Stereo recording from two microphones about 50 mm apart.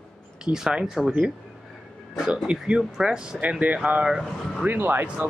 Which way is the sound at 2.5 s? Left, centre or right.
Centre.